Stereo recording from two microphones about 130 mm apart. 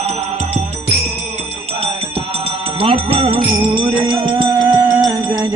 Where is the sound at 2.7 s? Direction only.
45° right (ahead or behind).